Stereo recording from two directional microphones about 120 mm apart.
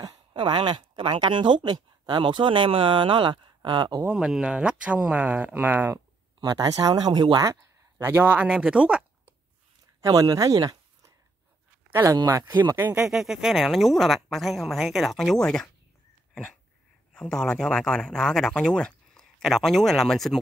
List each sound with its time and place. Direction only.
0.0 s speech: 40° right (ahead or behind)
4.0 s speech: 10° right (ahead or behind)
6.4 s speech: 35° right (ahead or behind)
8.0 s speech: 20° right (ahead or behind)
10.0 s speech: 30° right (ahead or behind)
12.8 s speech: 10° right (ahead or behind)
17.1 s speech: 5° left (ahead or behind)